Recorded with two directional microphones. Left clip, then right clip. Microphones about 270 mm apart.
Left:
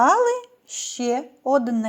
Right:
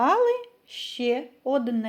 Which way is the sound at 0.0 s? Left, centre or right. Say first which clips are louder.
Left 4 dB; left.